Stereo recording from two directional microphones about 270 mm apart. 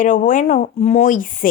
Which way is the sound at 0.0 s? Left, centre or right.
Left.